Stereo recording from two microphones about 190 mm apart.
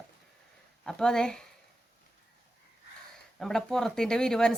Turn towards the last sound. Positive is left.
turn(degrees=5)  # may be behind; listen again after turning